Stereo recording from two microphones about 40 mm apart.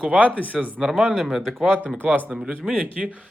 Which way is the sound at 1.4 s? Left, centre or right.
Centre.